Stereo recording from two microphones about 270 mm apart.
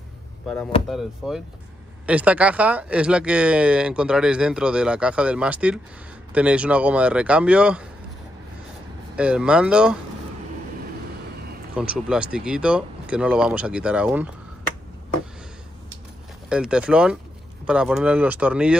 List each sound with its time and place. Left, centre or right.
0.8 s speech: centre
9.1 s speech: centre
11.7 s speech: centre
16.4 s speech: centre